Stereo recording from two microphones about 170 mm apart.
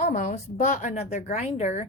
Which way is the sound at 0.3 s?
45° left (ahead or behind).